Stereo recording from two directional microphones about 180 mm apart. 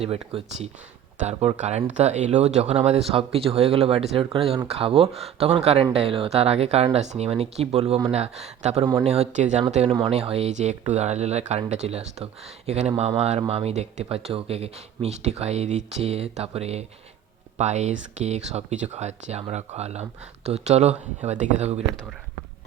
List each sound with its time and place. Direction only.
0.0 s speech: 30° right (ahead or behind)
8.8 s speech: 25° right (ahead or behind)
9.0 s speech: 35° right (ahead or behind)